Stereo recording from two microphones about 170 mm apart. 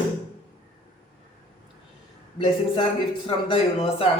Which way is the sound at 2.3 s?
30° left (ahead or behind).